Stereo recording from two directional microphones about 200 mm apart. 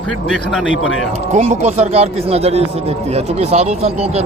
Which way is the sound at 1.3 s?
35° right (ahead or behind).